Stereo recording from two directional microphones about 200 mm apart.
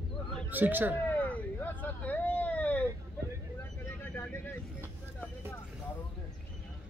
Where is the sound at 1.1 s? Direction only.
10° left (ahead or behind).